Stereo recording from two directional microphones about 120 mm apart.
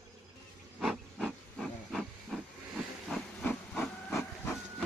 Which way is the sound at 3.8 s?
15° left (ahead or behind).